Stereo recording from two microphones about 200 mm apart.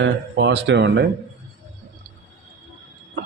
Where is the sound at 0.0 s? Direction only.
60° right (ahead or behind).